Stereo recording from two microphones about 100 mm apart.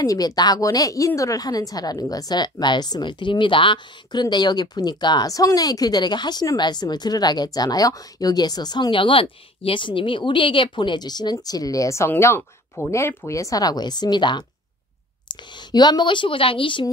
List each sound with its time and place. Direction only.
0.0 s a woman's voice: 40° left (ahead or behind); by 16.8 s 60° left (ahead or behind)